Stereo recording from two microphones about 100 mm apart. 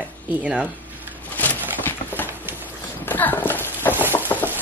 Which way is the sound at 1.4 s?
20° left (ahead or behind).